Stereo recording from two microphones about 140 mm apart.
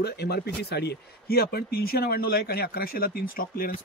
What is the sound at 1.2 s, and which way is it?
Speech, 90° left.